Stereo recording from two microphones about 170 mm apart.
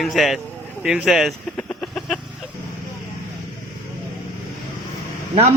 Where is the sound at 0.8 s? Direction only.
5° right (ahead or behind).